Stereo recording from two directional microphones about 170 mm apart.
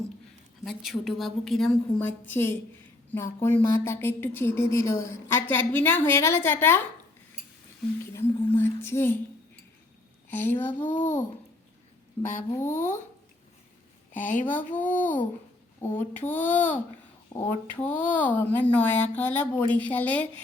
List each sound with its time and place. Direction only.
0.6 s a woman's voice: centre (ahead or behind)
8.1 s a woman's voice: 15° left (ahead or behind)
10.2 s speech: 10° left (ahead or behind)
10.8 s a child's voice: 45° left (ahead or behind)
12.7 s a child's voice: 45° left (ahead or behind)
14.2 s a child's voice: 50° left (ahead or behind)
14.4 s a woman's voice: 10° left (ahead or behind)